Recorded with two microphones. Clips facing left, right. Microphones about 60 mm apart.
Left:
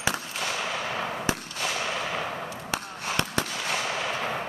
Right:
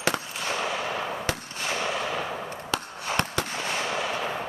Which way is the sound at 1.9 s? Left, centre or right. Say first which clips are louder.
Right 1 dB; centre.